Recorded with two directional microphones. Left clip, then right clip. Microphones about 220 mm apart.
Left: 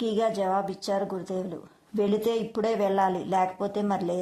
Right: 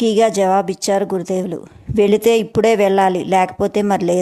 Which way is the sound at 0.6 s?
60° right (ahead or behind).